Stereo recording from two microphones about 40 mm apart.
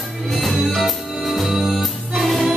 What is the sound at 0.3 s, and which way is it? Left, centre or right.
Music, centre.